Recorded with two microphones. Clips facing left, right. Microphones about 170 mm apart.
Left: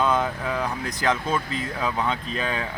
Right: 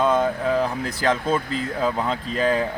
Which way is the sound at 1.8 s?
30° right (ahead or behind).